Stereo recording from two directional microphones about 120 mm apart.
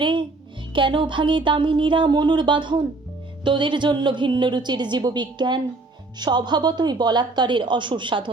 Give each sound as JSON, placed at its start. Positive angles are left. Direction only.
{"t": 0.0, "sound": "a child's voice", "side_deg": -40}